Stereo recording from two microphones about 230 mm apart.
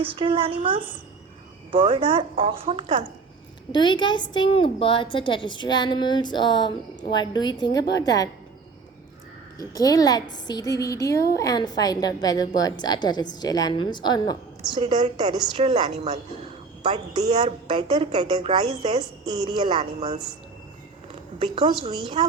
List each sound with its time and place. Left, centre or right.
0.0 s a woman's voice: right
3.7 s a woman's voice: centre
9.6 s a woman's voice: centre
14.7 s a woman's voice: right
21.3 s a woman's voice: right